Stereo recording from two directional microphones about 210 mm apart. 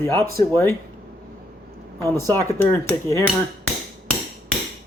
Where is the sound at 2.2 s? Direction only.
10° left (ahead or behind).